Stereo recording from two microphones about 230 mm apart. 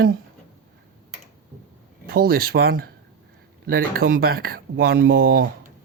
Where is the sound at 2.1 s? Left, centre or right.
Right.